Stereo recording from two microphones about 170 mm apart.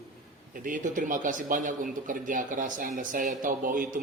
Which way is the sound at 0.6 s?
50° right (ahead or behind).